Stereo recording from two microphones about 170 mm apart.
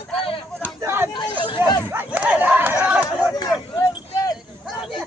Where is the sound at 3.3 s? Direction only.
20° left (ahead or behind).